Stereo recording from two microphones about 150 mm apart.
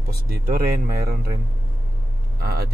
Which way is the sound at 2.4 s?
90° right.